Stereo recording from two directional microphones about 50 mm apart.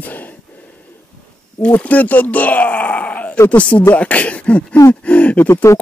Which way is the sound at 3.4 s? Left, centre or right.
Left.